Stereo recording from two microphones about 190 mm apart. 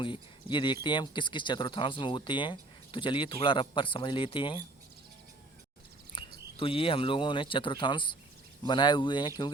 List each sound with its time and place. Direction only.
0.5 s speech: 25° left (ahead or behind)
6.1 s a sound: 25° left (ahead or behind)
6.6 s speech: 30° left (ahead or behind)